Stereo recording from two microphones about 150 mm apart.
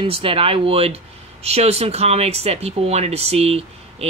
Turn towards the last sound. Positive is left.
turn(degrees=-45)  # may be behind; listen again after turning